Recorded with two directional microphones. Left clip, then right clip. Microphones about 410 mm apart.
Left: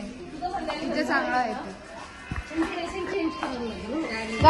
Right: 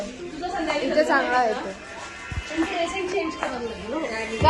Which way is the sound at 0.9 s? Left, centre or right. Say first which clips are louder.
Right 5 dB; centre.